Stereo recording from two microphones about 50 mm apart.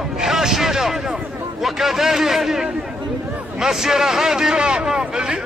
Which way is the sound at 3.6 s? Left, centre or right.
Centre.